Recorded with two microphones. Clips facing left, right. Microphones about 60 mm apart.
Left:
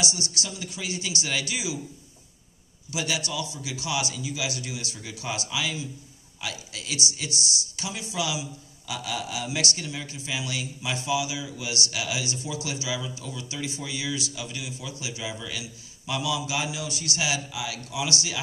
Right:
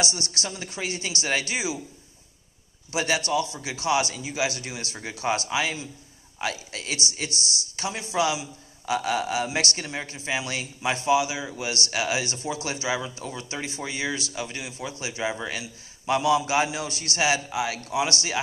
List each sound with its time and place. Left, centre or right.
0.0 s a man's voice: right
2.9 s a man's voice: right